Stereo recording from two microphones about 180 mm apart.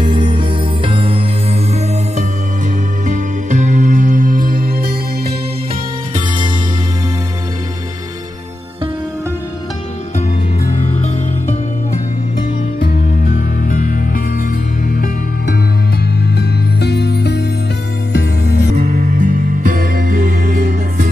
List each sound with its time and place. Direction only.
0.0 s music: 25° right (ahead or behind); by 4.9 s 55° right (ahead or behind)
10.6 s music: 40° left (ahead or behind)
12.8 s music: 55° left (ahead or behind)
18.8 s music: 55° right (ahead or behind)